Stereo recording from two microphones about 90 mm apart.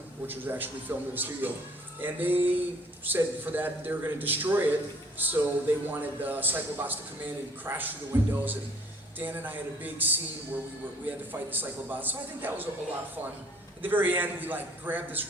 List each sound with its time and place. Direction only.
0.3 s a man's voice: 20° right (ahead or behind)
13.8 s a man's voice: 20° right (ahead or behind)